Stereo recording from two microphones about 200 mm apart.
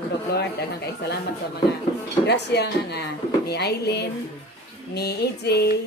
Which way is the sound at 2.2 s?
55° left (ahead or behind).